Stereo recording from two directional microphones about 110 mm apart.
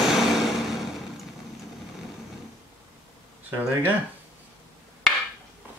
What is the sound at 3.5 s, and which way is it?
Speech, 20° right (ahead or behind).